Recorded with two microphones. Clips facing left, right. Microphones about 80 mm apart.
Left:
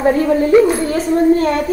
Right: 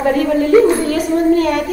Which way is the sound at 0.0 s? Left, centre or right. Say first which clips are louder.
Left 1 dB; left.